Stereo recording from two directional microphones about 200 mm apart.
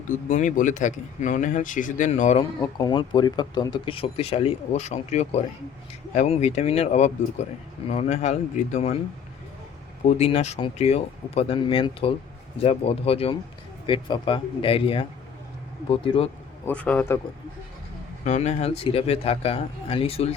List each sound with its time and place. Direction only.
0.3 s speech: 40° left (ahead or behind)
2.4 s speech: 20° left (ahead or behind)
10.1 s speech: 30° left (ahead or behind)
16.6 s a man's voice: 5° left (ahead or behind)
18.3 s speech: 35° left (ahead or behind)